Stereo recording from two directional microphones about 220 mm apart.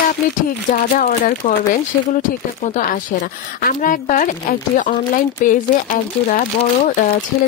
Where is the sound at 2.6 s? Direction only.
35° left (ahead or behind).